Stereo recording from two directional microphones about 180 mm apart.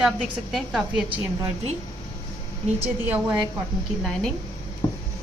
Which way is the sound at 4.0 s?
5° left (ahead or behind).